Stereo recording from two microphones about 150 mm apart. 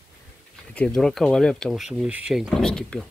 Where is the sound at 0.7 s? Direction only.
5° left (ahead or behind).